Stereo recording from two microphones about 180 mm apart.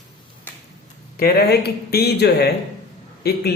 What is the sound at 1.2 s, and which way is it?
Speech, 65° left (ahead or behind).